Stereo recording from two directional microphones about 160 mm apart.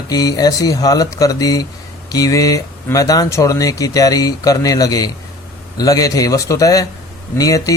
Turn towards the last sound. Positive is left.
turn(degrees=20)  # may be behind; listen again after turning